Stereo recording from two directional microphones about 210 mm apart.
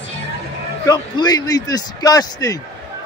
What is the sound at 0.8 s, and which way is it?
Speech, 20° left (ahead or behind).